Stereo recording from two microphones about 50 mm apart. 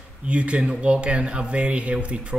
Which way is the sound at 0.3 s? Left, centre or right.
Right.